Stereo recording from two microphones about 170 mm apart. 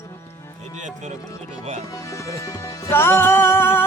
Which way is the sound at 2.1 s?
20° left (ahead or behind).